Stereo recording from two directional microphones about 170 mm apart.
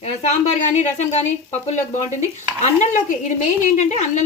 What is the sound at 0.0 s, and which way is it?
Speech, 40° left (ahead or behind).